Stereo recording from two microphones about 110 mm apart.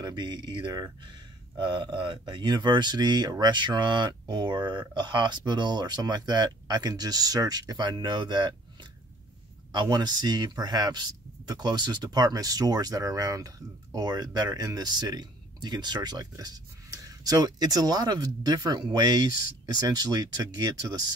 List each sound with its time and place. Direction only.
0.0 s speech: 45° right (ahead or behind)
9.7 s speech: 40° right (ahead or behind)